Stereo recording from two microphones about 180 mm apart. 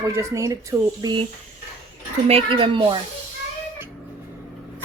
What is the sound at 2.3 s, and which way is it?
Speech, 30° right (ahead or behind).